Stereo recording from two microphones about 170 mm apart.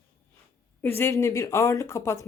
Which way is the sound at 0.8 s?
15° left (ahead or behind).